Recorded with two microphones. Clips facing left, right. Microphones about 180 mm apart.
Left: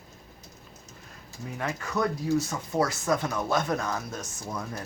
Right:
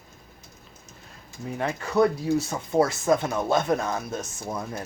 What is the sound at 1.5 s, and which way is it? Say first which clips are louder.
Speech: right 7 dB; 30° right (ahead or behind).